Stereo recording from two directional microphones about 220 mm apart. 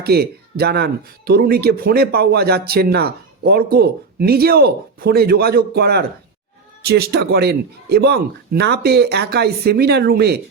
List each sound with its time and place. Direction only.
0.0 s speech: 45° right (ahead or behind)